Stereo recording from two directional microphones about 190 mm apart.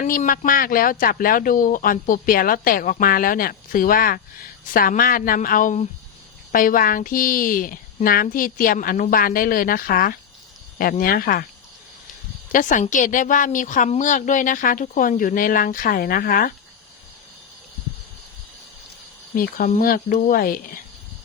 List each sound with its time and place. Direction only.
0.0 s speech: 40° left (ahead or behind)
12.5 s speech: 45° left (ahead or behind)
19.4 s speech: 50° left (ahead or behind)